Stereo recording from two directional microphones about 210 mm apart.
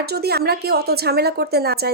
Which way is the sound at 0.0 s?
50° right (ahead or behind).